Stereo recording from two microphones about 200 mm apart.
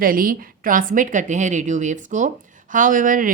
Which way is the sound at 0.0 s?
45° right (ahead or behind).